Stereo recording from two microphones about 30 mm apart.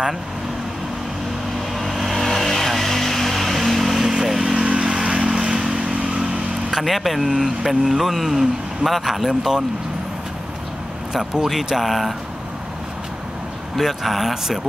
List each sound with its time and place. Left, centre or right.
1.8 s vehicle: centre
2.2 s vehicle: centre; by 6.2 s right
6.8 s speech: centre
9.3 s speech: centre
11.4 s speech: centre
13.7 s speech: centre